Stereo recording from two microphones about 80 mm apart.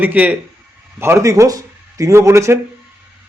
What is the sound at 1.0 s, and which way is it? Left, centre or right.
Speech, right.